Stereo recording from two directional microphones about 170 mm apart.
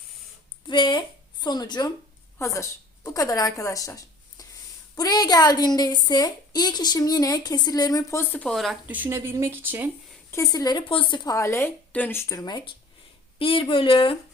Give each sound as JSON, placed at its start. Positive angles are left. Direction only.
{"t": 0.7, "sound": "a woman's voice", "side_deg": 25}
{"t": 10.3, "sound": "a woman's voice", "side_deg": 20}